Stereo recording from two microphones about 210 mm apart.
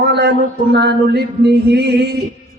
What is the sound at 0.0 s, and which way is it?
Speech, 55° right (ahead or behind).